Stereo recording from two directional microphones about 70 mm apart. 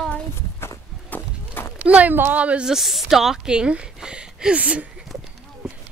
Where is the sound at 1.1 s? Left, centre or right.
Left.